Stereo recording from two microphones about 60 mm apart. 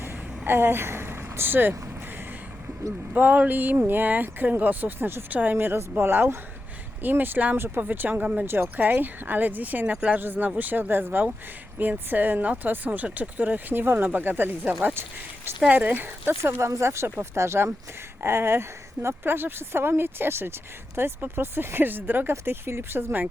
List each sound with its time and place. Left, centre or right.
0.0 s vehicle: right
3.1 s a woman's voice: right
8.4 s a woman's voice: right
15.7 s a woman's voice: right
16.3 s a woman's voice: right